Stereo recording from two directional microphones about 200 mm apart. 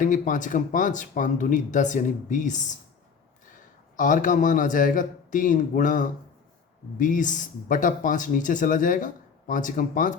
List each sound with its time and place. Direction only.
0.0 s speech: 40° left (ahead or behind)
3.9 s speech: 40° left (ahead or behind)